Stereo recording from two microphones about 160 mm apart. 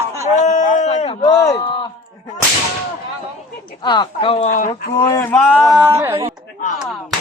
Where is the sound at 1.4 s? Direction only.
20° left (ahead or behind).